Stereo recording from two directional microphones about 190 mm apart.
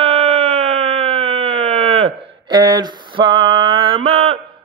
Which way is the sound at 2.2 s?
20° right (ahead or behind).